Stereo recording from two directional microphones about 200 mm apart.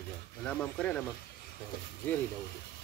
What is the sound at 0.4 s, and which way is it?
Speech, 5° left (ahead or behind).